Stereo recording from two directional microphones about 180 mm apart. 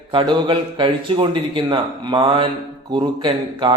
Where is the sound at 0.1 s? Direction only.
25° right (ahead or behind).